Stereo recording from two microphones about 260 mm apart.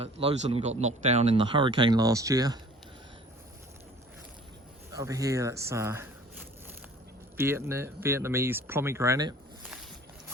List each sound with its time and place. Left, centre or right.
0.0 s speech: right
4.9 s speech: centre
7.3 s speech: centre